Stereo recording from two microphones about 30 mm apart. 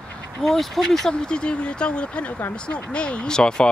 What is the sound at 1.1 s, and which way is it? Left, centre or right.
Speech, left.